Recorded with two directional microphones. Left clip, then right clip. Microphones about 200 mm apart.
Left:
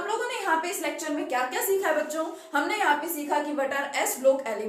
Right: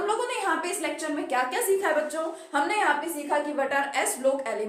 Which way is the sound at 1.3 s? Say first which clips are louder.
Right 2 dB; 30° right (ahead or behind).